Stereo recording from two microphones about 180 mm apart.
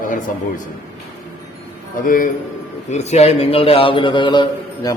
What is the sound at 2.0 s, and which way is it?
Speech, 50° left (ahead or behind).